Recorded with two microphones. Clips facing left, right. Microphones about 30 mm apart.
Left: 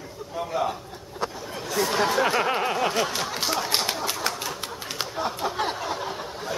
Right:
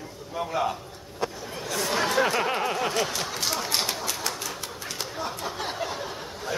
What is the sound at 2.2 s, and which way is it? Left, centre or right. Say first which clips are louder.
Speech: left 2 dB; centre.